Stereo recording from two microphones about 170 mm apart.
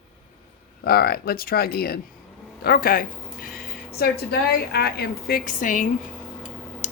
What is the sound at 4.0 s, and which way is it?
A woman's voice, 70° left (ahead or behind).